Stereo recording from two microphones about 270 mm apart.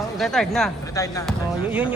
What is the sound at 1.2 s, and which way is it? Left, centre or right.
Speech, centre.